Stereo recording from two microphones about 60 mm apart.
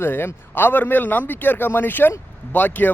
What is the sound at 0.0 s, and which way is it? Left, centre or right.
Speech, left.